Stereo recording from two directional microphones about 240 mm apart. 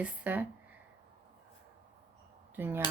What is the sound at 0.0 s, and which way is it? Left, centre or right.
Speech, centre.